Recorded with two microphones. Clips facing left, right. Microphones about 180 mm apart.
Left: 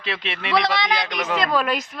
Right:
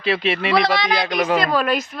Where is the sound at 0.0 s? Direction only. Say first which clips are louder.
Right 9 dB; 5° right (ahead or behind).